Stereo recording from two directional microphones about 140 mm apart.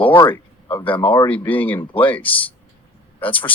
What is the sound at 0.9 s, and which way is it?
Speech, 35° left (ahead or behind).